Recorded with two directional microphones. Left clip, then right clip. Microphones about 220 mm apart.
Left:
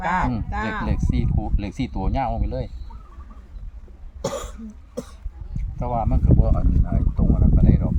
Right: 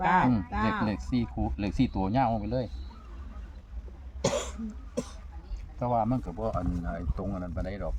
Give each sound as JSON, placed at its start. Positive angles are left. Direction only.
{"t": 0.0, "sound": "speech", "side_deg": 50}
{"t": 0.9, "sound": "speech", "side_deg": 0}
{"t": 4.2, "sound": "cough", "side_deg": 10}
{"t": 5.8, "sound": "speech", "side_deg": 0}